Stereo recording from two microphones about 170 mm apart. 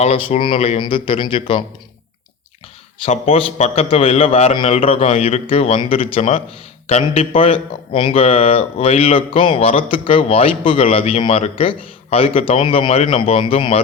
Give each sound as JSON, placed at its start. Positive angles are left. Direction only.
{"t": 0.0, "sound": "speech", "side_deg": 35}
{"t": 3.0, "sound": "speech", "side_deg": 35}